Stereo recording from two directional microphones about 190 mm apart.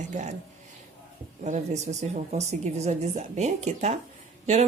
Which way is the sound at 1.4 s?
40° right (ahead or behind).